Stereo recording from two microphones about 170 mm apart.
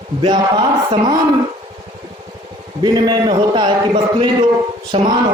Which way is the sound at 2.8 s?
25° right (ahead or behind).